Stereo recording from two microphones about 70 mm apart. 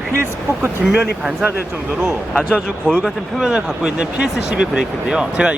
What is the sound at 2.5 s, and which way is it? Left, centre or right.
Speech, centre.